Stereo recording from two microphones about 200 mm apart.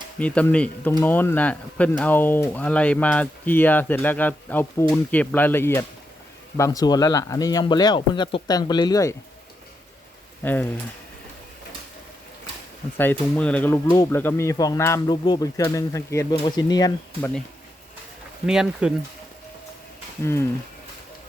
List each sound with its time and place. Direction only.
0.2 s speech: 5° left (ahead or behind)
10.4 s speech: 10° left (ahead or behind)
13.0 s speech: 10° left (ahead or behind)
17.2 s speech: 10° left (ahead or behind)
18.4 s speech: 5° right (ahead or behind)
20.2 s speech: 15° left (ahead or behind)